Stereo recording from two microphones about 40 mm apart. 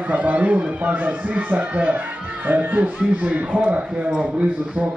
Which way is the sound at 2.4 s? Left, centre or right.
Right.